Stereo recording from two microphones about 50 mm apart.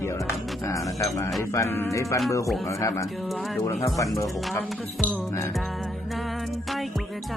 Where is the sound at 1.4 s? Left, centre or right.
Left.